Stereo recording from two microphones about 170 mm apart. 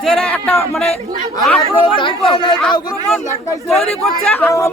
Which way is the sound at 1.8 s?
30° left (ahead or behind).